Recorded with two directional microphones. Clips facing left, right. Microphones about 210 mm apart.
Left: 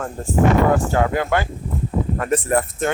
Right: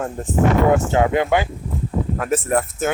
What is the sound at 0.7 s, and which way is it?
Speech, 20° right (ahead or behind).